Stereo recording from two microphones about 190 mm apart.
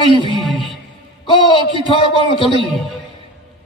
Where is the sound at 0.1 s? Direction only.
25° left (ahead or behind).